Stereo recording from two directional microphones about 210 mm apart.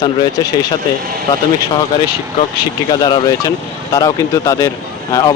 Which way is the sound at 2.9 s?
20° left (ahead or behind).